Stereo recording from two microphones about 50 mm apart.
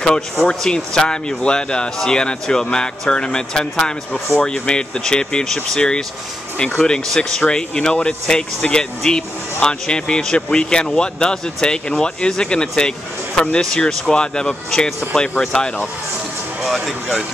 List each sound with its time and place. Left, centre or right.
0.5 s speech: centre
7.2 s speech: centre
16.6 s speech: centre